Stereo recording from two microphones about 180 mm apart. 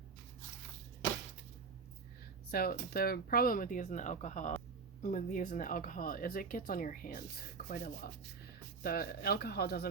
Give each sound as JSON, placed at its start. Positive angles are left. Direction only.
{"t": 2.5, "sound": "speech", "side_deg": 60}